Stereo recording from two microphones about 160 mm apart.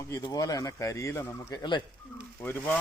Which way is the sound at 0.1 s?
25° left (ahead or behind).